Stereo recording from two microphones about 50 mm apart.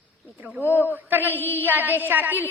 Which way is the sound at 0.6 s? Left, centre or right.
Left.